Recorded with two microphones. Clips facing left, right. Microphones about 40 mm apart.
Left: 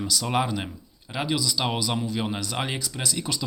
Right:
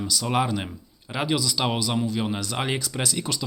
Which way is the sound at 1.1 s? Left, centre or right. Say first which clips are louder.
Right 1 dB; centre.